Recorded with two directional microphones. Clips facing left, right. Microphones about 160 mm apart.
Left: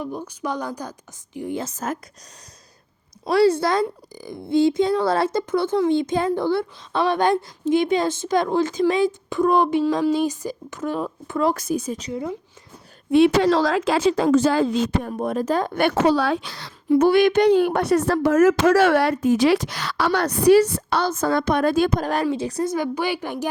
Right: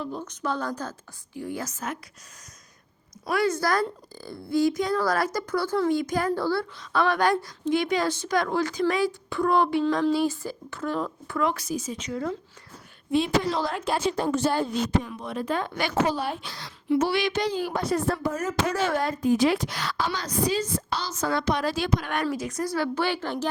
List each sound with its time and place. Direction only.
0.0 s a woman's voice: 15° left (ahead or behind)
3.2 s a woman's voice: 30° left (ahead or behind); by 11.3 s 15° left (ahead or behind)
11.5 s speech: 50° left (ahead or behind)
12.1 s a woman's voice: 15° left (ahead or behind)
13.1 s a woman's voice: 70° left (ahead or behind); by 14.8 s 90° left
15.2 s speech: 45° left (ahead or behind)
15.8 s speech: 70° left (ahead or behind)
16.9 s speech: 50° left (ahead or behind)
22.1 s speech: 30° left (ahead or behind)
22.7 s a woman's voice: 15° left (ahead or behind)